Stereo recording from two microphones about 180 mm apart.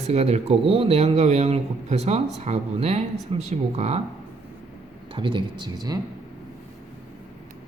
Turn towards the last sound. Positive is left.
turn(degrees=-25)  # may be behind; listen again after turning